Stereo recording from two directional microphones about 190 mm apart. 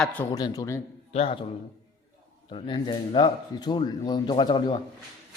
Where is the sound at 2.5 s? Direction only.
25° left (ahead or behind).